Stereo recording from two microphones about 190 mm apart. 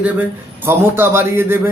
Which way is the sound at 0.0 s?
10° right (ahead or behind).